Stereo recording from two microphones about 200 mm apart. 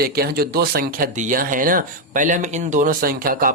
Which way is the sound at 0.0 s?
50° right (ahead or behind).